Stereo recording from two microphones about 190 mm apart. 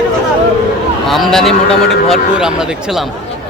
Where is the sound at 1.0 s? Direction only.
Centre (ahead or behind).